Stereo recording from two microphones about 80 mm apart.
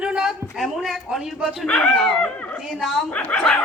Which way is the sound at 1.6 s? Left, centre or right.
Centre.